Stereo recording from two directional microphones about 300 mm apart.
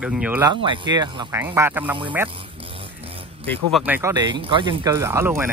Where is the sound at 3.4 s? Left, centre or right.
Centre.